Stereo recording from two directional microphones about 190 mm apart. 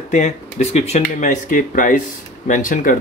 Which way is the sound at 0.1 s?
35° left (ahead or behind).